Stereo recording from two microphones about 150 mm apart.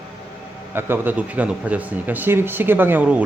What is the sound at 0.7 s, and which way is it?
Speech, 15° right (ahead or behind).